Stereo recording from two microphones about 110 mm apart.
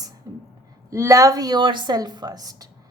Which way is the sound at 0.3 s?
30° right (ahead or behind).